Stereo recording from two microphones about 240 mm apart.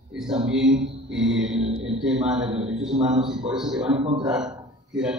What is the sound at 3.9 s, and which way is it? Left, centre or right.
Speech, right.